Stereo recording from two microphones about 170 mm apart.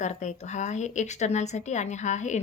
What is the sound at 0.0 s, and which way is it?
A woman's voice, 45° left (ahead or behind).